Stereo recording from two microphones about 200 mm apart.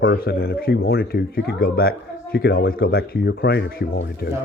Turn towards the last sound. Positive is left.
turn(degrees=50)  # may be behind; listen again after turning